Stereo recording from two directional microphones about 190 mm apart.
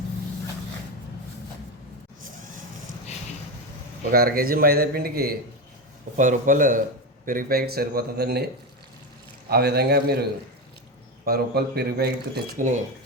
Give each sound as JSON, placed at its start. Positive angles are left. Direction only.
{"t": 4.1, "sound": "a man's voice", "side_deg": -50}
{"t": 6.1, "sound": "a man's voice", "side_deg": -40}
{"t": 9.5, "sound": "speech", "side_deg": -55}
{"t": 11.3, "sound": "speech", "side_deg": -55}